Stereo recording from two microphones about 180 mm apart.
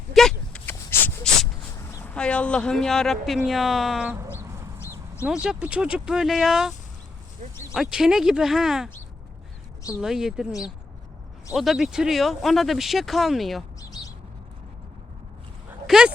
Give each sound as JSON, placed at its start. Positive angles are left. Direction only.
{"t": 0.1, "sound": "a sound", "side_deg": 0}
{"t": 1.9, "sound": "speech", "side_deg": 10}
{"t": 4.4, "sound": "chicken", "side_deg": -15}
{"t": 5.2, "sound": "speech", "side_deg": -5}
{"t": 10.0, "sound": "speech", "side_deg": -5}
{"t": 11.5, "sound": "speech", "side_deg": 0}
{"t": 15.9, "sound": "speech", "side_deg": -5}